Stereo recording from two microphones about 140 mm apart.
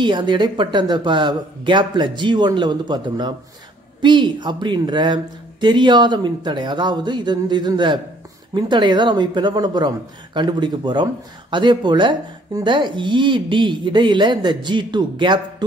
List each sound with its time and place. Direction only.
0.0 s speech: 35° right (ahead or behind)